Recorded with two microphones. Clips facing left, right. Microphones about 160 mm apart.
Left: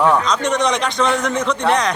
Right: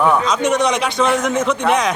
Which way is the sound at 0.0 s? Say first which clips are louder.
Even; 5° right (ahead or behind).